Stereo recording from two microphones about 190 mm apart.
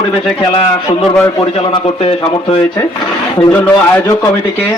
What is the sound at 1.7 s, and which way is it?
Speech, 30° left (ahead or behind).